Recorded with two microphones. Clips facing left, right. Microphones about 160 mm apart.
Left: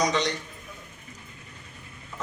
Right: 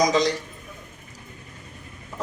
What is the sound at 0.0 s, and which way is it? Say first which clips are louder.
Speech: right 5 dB; 35° right (ahead or behind).